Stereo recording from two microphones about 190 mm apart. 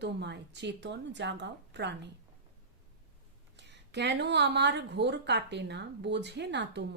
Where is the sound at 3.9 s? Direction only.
65° right (ahead or behind).